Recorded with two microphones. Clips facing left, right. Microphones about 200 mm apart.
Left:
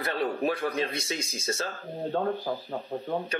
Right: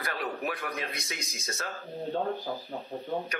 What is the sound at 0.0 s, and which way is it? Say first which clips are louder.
Speech: left 6 dB; 30° left (ahead or behind).